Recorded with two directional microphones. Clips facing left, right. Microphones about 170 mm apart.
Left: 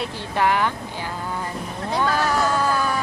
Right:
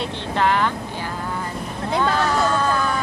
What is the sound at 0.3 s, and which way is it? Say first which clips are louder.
Speech: right 1 dB; 15° left (ahead or behind).